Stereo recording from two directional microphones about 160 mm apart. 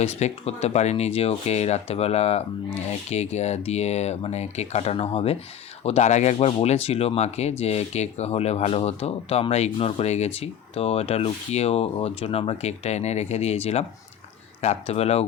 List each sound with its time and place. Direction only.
0.0 s speech: 45° left (ahead or behind)